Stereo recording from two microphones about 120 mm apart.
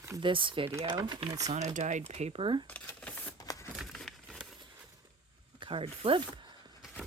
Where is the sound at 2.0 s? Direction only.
65° right (ahead or behind).